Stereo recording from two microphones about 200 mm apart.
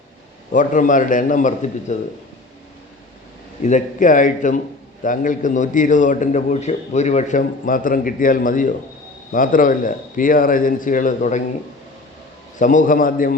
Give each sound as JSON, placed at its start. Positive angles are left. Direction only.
{"t": 0.5, "sound": "a man's voice", "side_deg": 40}
{"t": 3.6, "sound": "a man's voice", "side_deg": 35}
{"t": 12.5, "sound": "a man's voice", "side_deg": 40}